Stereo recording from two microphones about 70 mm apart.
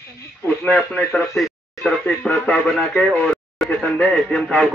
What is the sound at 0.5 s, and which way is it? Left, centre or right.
Speech, centre.